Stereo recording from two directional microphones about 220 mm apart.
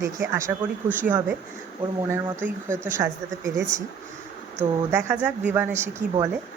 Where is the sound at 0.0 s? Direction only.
15° right (ahead or behind).